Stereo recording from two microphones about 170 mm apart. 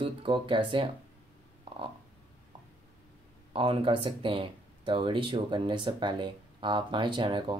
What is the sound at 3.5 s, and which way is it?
Speech, 30° right (ahead or behind).